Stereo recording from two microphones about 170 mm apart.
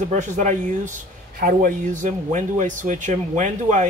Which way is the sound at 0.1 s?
45° right (ahead or behind).